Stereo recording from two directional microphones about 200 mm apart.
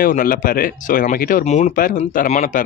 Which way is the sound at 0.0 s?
45° left (ahead or behind).